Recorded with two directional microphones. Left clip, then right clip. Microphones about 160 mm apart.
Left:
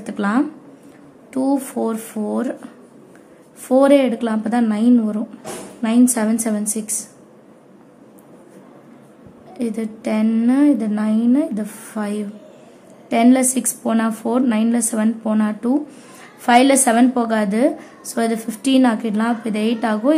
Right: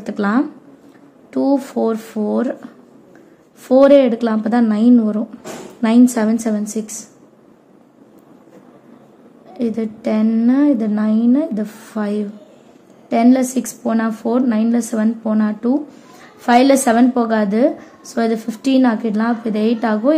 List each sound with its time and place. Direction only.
0.0 s a woman's voice: 20° right (ahead or behind)
9.5 s a woman's voice: 15° right (ahead or behind)